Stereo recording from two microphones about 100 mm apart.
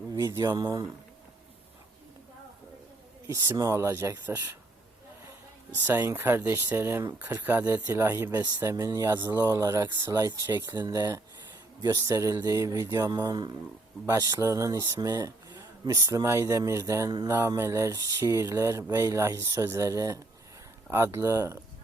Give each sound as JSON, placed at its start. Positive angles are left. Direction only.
{"t": 0.1, "sound": "speech", "side_deg": -35}
{"t": 3.2, "sound": "speech", "side_deg": -25}
{"t": 5.7, "sound": "speech", "side_deg": -20}
{"t": 13.1, "sound": "speech", "side_deg": -40}